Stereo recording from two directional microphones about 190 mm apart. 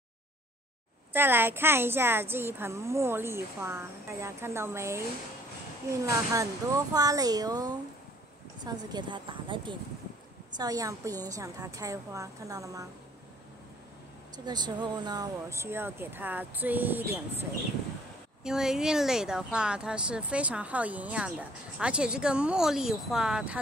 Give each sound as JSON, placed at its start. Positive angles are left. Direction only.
{"t": 1.1, "sound": "a woman's voice", "side_deg": -10}
{"t": 6.3, "sound": "a woman's voice", "side_deg": -20}
{"t": 14.3, "sound": "a woman's voice", "side_deg": -20}
{"t": 18.4, "sound": "speech", "side_deg": -5}